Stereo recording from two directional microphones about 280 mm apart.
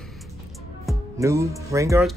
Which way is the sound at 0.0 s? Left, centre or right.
Centre.